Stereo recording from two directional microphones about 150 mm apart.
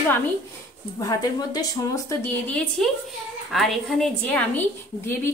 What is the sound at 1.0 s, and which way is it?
Speech, 25° left (ahead or behind).